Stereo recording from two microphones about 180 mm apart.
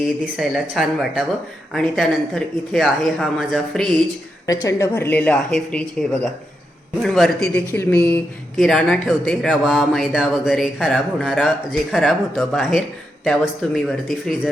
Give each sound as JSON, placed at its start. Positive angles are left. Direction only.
{"t": 0.3, "sound": "speech", "side_deg": 0}
{"t": 4.4, "sound": "speech", "side_deg": 15}
{"t": 7.5, "sound": "speech", "side_deg": 10}